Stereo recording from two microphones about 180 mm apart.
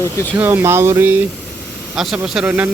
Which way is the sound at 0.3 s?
10° right (ahead or behind).